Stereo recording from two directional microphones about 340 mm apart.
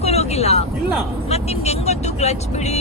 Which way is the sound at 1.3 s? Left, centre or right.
Centre.